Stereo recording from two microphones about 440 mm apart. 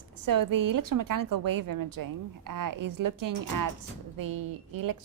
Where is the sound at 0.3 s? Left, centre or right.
Right.